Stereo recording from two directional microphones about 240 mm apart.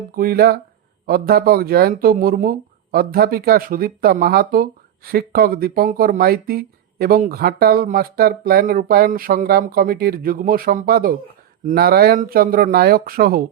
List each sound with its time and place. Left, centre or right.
0.2 s speech: right